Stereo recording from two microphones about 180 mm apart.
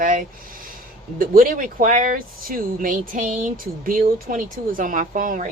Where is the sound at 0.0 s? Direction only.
45° right (ahead or behind).